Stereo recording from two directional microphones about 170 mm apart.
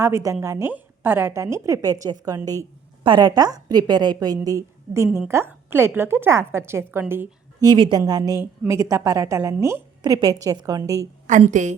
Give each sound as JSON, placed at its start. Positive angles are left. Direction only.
{"t": 0.0, "sound": "a woman's voice", "side_deg": -15}
{"t": 7.6, "sound": "a woman's voice", "side_deg": -25}
{"t": 11.3, "sound": "a woman's voice", "side_deg": -45}